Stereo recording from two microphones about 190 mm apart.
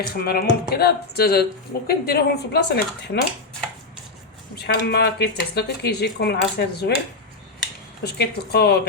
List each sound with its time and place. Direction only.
0.1 s speech: 55° left (ahead or behind)
4.5 s speech: 60° left (ahead or behind)
8.0 s speech: 60° left (ahead or behind)